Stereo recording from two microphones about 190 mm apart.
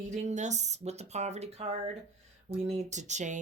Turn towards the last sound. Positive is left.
turn(degrees=-40)  # may be behind; listen again after turning